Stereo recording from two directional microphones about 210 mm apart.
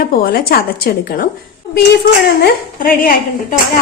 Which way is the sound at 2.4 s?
40° left (ahead or behind).